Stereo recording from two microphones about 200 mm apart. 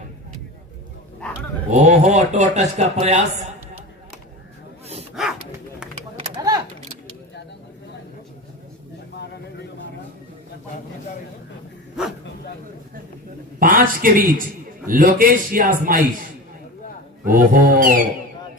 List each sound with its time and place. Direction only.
1.7 s a man's voice: 35° right (ahead or behind)
5.2 s dog: centre (ahead or behind)
6.3 s a sound: 20° right (ahead or behind)
13.6 s a man's voice: 45° right (ahead or behind)
17.2 s a man's voice: 45° right (ahead or behind)